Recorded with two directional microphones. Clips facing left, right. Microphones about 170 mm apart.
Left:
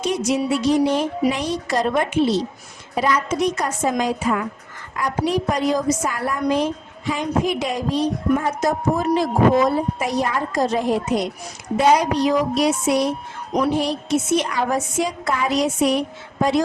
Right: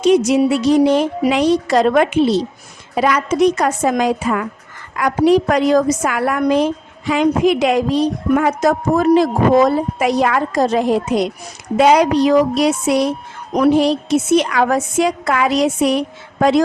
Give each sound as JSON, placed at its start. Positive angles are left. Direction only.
{"t": 0.0, "sound": "a woman's voice", "side_deg": -75}
{"t": 8.4, "sound": "a woman's voice", "side_deg": -90}